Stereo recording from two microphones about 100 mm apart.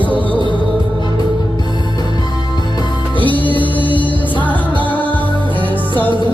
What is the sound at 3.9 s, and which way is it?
Music, 55° left (ahead or behind).